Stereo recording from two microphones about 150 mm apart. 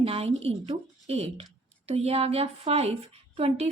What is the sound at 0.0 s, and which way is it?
A woman's voice, 40° right (ahead or behind).